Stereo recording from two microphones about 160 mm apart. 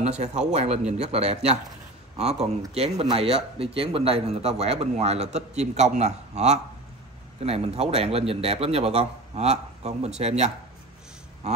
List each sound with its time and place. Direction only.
0.0 s speech: 45° right (ahead or behind)